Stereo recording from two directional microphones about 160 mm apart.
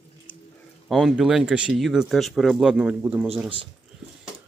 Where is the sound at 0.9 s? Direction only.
Centre (ahead or behind).